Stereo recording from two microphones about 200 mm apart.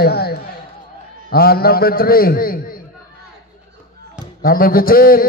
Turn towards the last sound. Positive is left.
turn(degrees=45)  # may be behind; listen again after turning